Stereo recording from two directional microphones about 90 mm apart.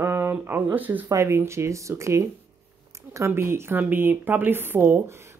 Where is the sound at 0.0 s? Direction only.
30° right (ahead or behind).